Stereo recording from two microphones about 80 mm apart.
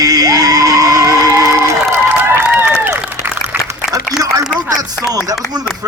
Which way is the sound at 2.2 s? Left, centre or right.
Right.